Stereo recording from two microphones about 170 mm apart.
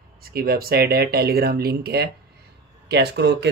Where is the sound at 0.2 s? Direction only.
65° right (ahead or behind).